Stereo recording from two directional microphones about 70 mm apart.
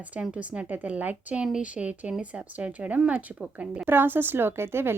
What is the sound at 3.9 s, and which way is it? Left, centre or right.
Speech, right.